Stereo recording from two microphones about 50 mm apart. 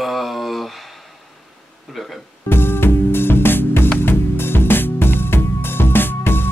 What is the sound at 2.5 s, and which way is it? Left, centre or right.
Music, left.